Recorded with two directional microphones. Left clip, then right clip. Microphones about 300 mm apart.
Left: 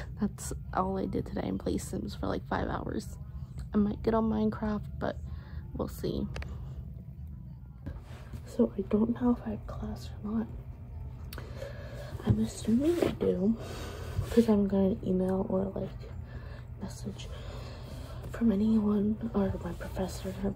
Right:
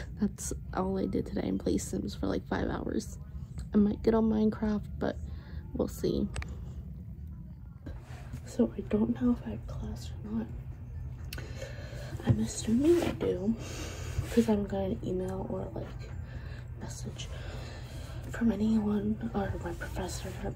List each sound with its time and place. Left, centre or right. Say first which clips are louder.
0.2 s a woman's voice: right 1 dB; centre
8.5 s speech: left 1 dB; centre
11.3 s whispering: left 1 dB; centre
13.2 s speech: left 2 dB; centre
16.8 s speech: even; centre
18.3 s speech: left 1 dB; centre